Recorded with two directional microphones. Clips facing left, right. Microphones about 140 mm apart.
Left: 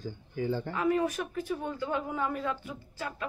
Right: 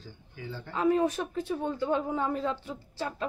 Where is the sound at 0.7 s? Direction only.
20° right (ahead or behind).